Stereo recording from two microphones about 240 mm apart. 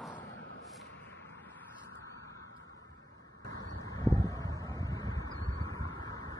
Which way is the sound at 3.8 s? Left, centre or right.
Centre.